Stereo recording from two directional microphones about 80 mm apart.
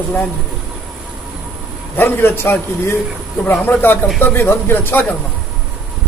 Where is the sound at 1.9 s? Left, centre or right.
Left.